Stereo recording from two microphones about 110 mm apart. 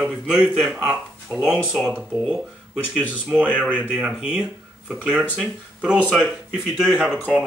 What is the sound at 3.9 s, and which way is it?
Speech, 5° right (ahead or behind).